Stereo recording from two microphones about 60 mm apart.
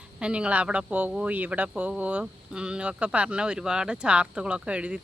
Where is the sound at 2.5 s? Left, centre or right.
Centre.